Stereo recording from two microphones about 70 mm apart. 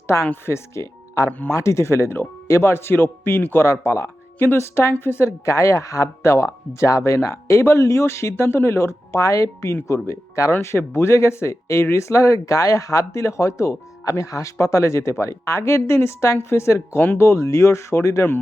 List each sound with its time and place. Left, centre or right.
0.4 s speech: left